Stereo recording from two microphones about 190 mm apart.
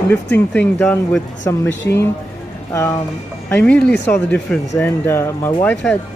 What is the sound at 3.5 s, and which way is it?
Speech, 5° left (ahead or behind).